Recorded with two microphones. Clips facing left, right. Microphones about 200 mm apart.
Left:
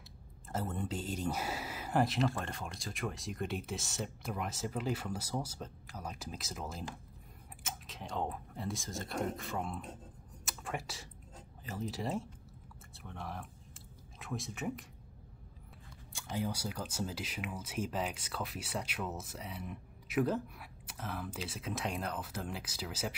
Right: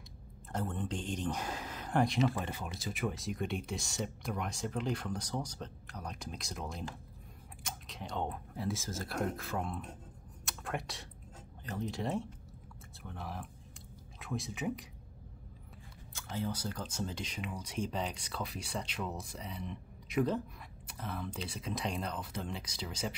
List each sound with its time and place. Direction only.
0.5 s speech: 5° left (ahead or behind)
10.4 s a sound: centre (ahead or behind)
11.6 s speech: 5° left (ahead or behind)
16.1 s speech: 15° left (ahead or behind)